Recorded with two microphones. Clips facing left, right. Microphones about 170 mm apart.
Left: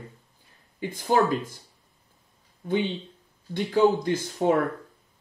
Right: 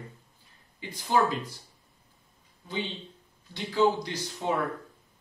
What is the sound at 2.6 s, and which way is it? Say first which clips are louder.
Speech: left 8 dB; 55° left (ahead or behind).